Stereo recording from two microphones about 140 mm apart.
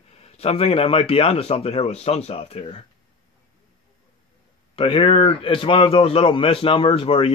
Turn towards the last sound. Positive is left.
turn(degrees=40)  # may be behind; listen again after turning